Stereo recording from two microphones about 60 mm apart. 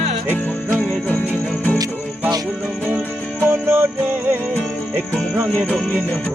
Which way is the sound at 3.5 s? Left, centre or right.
Right.